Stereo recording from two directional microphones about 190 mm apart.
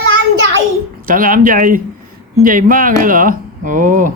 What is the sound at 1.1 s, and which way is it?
Speech, 45° right (ahead or behind).